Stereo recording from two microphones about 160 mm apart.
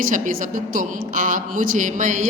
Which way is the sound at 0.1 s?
60° right (ahead or behind).